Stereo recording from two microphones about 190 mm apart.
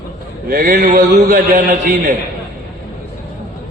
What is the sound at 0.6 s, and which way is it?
A man's voice, 40° right (ahead or behind).